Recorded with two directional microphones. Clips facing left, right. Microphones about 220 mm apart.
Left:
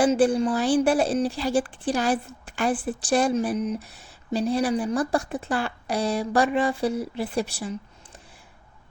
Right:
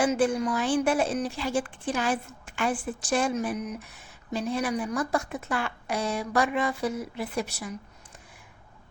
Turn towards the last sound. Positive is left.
turn(degrees=30)  # may be behind; listen again after turning